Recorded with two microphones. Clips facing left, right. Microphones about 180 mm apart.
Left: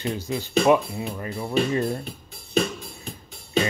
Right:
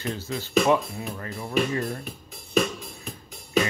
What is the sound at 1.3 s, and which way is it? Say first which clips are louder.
Speech: left 2 dB; 30° left (ahead or behind).